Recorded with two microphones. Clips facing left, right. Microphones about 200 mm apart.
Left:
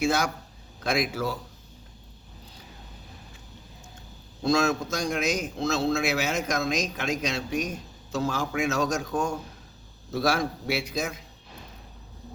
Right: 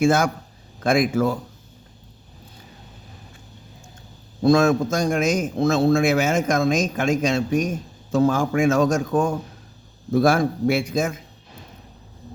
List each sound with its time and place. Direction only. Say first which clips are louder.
0.0 s a man's voice: right 7 dB; 50° right (ahead or behind)
4.4 s a man's voice: right 8 dB; 55° right (ahead or behind)